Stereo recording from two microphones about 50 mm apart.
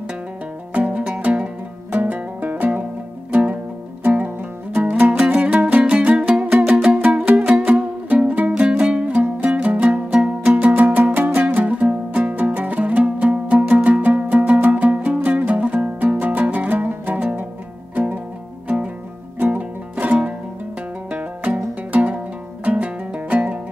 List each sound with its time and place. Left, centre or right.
0.7 s music: right
1.9 s music: right
5.1 s music: right
19.4 s music: right